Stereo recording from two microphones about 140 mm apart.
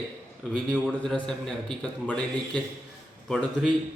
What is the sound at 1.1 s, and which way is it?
A man's voice, 5° left (ahead or behind).